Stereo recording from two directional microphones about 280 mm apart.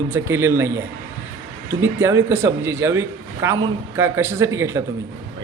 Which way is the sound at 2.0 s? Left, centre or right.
Centre.